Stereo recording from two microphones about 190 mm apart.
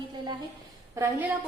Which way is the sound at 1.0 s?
10° right (ahead or behind).